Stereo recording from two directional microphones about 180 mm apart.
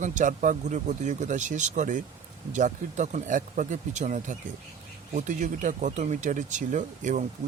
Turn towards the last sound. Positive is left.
turn(degrees=-45)  # may be behind; listen again after turning